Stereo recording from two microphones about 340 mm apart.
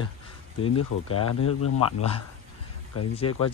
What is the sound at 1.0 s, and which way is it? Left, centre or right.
Speech, left.